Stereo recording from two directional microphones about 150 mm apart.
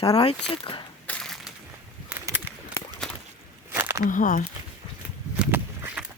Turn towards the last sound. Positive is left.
turn(degrees=-10)  # may be behind; listen again after turning